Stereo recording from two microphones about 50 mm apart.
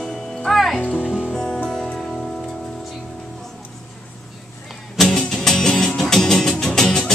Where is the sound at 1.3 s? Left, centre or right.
Centre.